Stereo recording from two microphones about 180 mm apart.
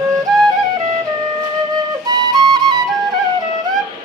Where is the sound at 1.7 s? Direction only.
20° right (ahead or behind).